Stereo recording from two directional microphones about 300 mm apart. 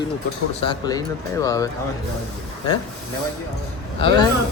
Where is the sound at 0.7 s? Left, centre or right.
Centre.